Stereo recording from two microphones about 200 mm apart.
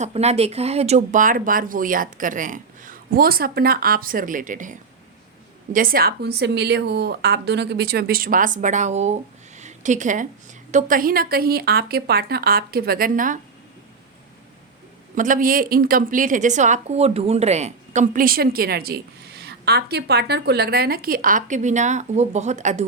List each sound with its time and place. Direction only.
0.0 s a woman's voice: 30° right (ahead or behind)
9.6 s a sound: 35° right (ahead or behind)
10.7 s a woman's voice: 40° right (ahead or behind)
15.1 s a woman's voice: 40° right (ahead or behind)